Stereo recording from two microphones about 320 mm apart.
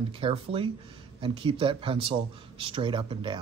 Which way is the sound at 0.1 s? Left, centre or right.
Centre.